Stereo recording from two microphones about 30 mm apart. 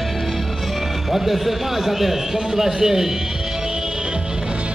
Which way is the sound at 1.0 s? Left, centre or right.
Centre.